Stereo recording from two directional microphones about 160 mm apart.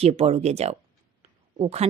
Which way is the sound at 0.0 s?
40° right (ahead or behind).